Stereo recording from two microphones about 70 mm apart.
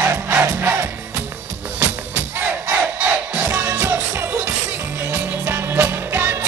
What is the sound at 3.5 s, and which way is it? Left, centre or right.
Music, right.